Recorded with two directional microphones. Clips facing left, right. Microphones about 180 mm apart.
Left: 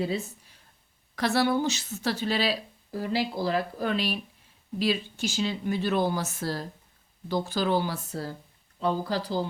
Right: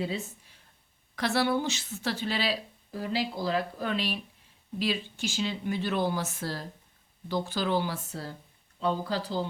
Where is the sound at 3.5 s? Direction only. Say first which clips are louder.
Left 2 dB; 40° left (ahead or behind).